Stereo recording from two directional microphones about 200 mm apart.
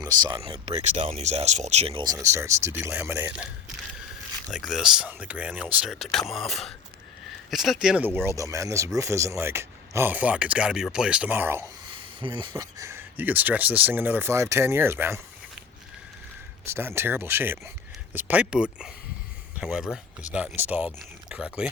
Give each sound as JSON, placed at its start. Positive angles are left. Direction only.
{"t": 0.0, "sound": "speech", "side_deg": -20}
{"t": 2.1, "sound": "speech", "side_deg": -15}
{"t": 11.9, "sound": "speech", "side_deg": -25}
{"t": 16.6, "sound": "speech", "side_deg": -10}